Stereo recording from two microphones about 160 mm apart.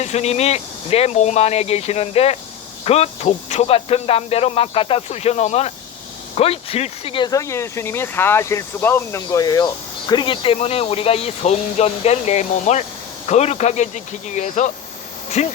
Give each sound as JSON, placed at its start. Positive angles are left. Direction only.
{"t": 0.0, "sound": "speech", "side_deg": 45}
{"t": 7.3, "sound": "speech", "side_deg": 20}